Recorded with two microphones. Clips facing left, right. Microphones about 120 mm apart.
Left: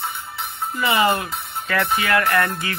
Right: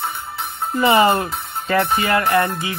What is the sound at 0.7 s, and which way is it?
Speech, 35° right (ahead or behind).